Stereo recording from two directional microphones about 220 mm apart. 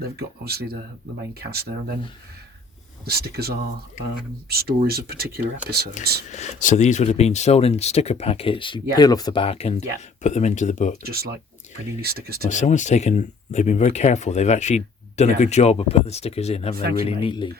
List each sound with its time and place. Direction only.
0.0 s speech: 45° right (ahead or behind)
3.0 s speech: 45° right (ahead or behind)
6.3 s speech: 35° left (ahead or behind)
11.0 s speech: 45° right (ahead or behind)
12.5 s speech: 35° left (ahead or behind)
16.7 s speech: 45° right (ahead or behind)
17.1 s speech: 20° left (ahead or behind)